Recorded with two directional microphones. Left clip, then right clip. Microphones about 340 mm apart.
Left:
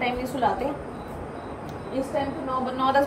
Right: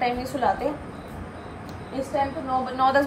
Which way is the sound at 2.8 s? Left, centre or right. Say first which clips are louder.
Right 1 dB; centre.